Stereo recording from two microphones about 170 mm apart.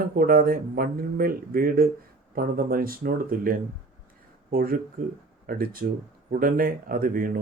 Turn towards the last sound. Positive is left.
turn(degrees=-55)  # may be behind; listen again after turning